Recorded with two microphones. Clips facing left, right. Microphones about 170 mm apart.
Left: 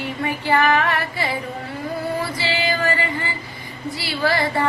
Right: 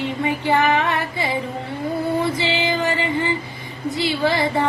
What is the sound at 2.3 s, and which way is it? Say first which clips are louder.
Music: right 2 dB; 20° right (ahead or behind).